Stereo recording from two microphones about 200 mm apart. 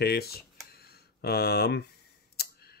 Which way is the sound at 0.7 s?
50° left (ahead or behind).